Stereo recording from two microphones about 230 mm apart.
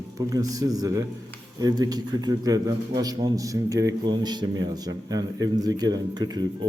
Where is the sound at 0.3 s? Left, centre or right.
Centre.